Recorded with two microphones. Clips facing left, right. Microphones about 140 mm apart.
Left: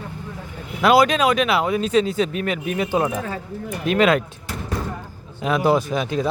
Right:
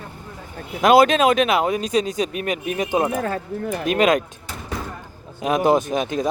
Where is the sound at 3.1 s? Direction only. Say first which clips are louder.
Right 3 dB; 50° right (ahead or behind).